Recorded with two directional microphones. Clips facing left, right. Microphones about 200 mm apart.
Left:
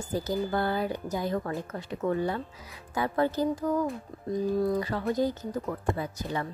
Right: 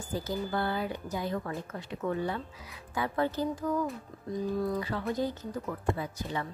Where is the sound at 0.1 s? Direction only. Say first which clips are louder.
Left 4 dB; 40° left (ahead or behind).